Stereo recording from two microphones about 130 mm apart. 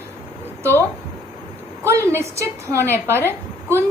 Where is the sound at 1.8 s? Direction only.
20° right (ahead or behind).